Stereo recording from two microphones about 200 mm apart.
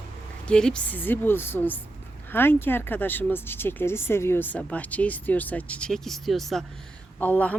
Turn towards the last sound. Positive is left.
turn(degrees=5)  # may be behind; listen again after turning